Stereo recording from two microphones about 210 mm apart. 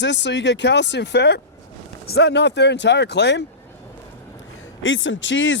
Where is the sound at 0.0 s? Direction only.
60° left (ahead or behind).